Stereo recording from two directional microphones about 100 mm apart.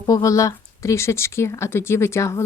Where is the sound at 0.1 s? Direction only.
35° left (ahead or behind).